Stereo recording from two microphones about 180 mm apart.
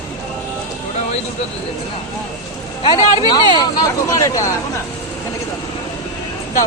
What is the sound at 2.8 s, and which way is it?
Speech, 25° left (ahead or behind).